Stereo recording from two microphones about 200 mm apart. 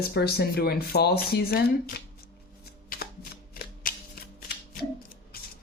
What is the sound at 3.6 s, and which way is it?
Shuffling cards, 45° left (ahead or behind).